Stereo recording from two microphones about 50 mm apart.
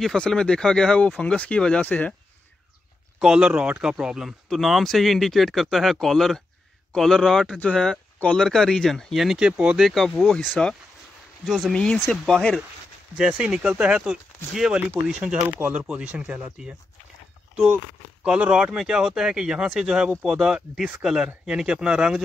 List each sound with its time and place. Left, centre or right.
0.0 s speech: centre
3.2 s speech: centre
7.5 s speech: left
8.4 s speech: centre
9.1 s speech: centre
9.4 s speech: right
9.8 s speech: centre
11.4 s speech: centre
11.7 s speech: centre
13.4 s speech: right
14.1 s speech: centre
15.7 s speech: right
18.2 s speech: right